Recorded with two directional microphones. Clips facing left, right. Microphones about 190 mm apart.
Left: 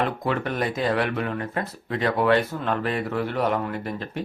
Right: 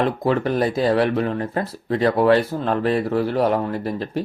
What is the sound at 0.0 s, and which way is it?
Speech, 35° right (ahead or behind).